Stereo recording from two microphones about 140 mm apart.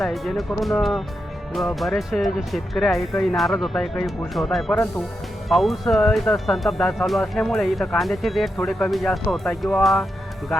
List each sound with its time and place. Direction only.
0.0 s speech: centre (ahead or behind)